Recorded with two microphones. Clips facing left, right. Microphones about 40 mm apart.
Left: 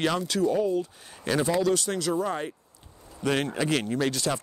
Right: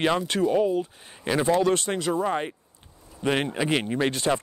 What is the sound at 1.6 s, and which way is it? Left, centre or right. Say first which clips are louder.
Speech: right 2 dB; right.